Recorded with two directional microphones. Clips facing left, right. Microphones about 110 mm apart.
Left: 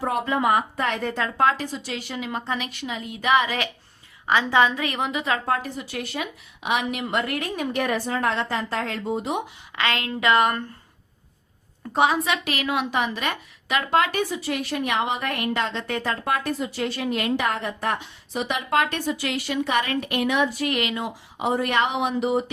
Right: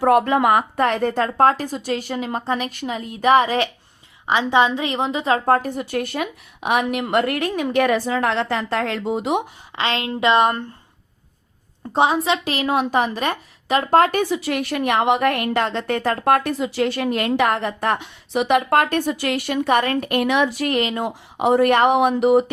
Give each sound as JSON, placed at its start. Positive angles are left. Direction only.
{"t": 0.0, "sound": "a woman's voice", "side_deg": -65}
{"t": 0.9, "sound": "a woman's voice", "side_deg": -45}
{"t": 4.3, "sound": "a woman's voice", "side_deg": -20}
{"t": 5.5, "sound": "a woman's voice", "side_deg": -45}
{"t": 9.7, "sound": "a woman's voice", "side_deg": -25}
{"t": 11.9, "sound": "a woman's voice", "side_deg": -25}
{"t": 14.3, "sound": "a woman's voice", "side_deg": -70}
{"t": 20.2, "sound": "speech", "side_deg": -70}
{"t": 20.7, "sound": "a woman's voice", "side_deg": -40}
{"t": 21.0, "sound": "speech", "side_deg": -60}